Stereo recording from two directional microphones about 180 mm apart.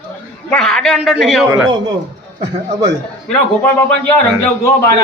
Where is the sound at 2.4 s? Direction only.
20° right (ahead or behind).